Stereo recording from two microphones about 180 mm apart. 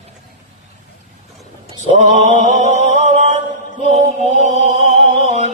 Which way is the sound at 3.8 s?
40° right (ahead or behind).